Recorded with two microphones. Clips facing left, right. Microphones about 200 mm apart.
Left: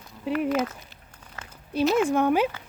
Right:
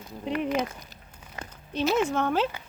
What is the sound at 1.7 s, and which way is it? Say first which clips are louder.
Speech: left 3 dB; centre (ahead or behind).